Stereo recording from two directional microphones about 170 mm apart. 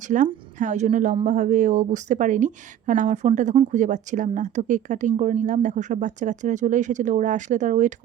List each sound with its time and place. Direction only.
0.1 s speech: 50° right (ahead or behind)